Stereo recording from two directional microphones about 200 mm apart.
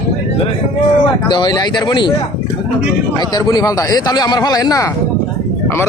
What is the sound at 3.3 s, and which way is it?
Speech, 20° left (ahead or behind).